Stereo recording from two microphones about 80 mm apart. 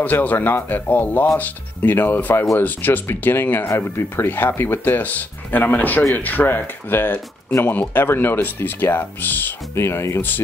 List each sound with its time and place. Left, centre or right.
0.0 s speech: left
9.8 s speech: left